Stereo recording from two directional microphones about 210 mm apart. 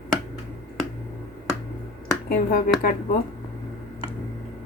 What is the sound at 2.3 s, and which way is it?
Speech, 45° left (ahead or behind).